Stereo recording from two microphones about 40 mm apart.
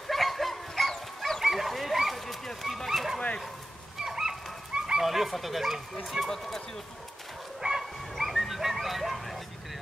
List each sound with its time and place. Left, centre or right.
0.1 s bow-wow: centre
1.4 s bow-wow: centre
2.4 s a sound: centre
4.0 s fowl: centre
5.0 s speech: centre
7.6 s bow-wow: right
8.2 s a sound: centre